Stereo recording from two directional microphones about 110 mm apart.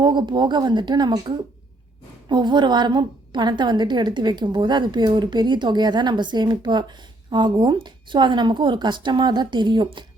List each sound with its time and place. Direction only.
0.0 s a woman's voice: 45° right (ahead or behind)
2.3 s a woman's voice: 45° right (ahead or behind)